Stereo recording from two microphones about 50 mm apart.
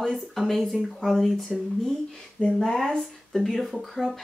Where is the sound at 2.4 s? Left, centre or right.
Centre.